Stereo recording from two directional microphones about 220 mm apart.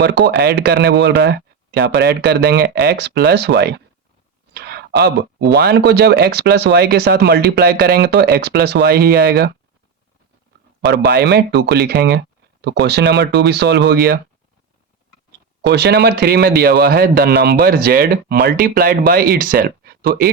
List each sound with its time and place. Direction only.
0.0 s speech: 50° right (ahead or behind)
4.5 s a sound: 50° right (ahead or behind)
5.5 s speech: 50° right (ahead or behind)
11.1 s speech: 50° right (ahead or behind)
15.6 s speech: 50° right (ahead or behind)